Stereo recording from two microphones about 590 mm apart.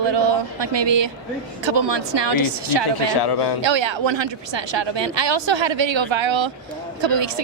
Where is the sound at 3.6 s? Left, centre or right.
Right.